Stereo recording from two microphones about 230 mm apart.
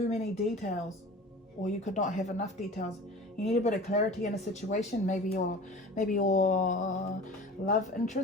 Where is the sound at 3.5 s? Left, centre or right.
Left.